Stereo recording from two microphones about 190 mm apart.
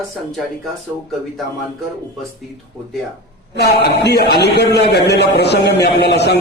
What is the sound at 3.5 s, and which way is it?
A man's voice, 60° left (ahead or behind).